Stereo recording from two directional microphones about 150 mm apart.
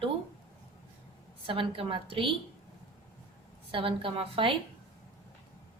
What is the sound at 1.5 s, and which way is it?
Speech, 35° right (ahead or behind).